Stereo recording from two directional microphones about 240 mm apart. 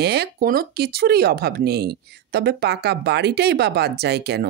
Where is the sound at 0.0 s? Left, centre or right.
Right.